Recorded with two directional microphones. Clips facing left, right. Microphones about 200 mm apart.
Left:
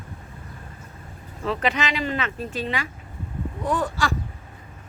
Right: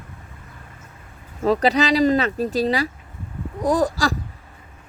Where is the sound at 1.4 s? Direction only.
35° right (ahead or behind).